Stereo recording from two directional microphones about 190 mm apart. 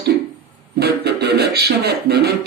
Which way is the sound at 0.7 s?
60° right (ahead or behind).